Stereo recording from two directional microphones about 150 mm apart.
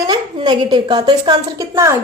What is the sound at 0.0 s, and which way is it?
A woman's voice, 30° right (ahead or behind).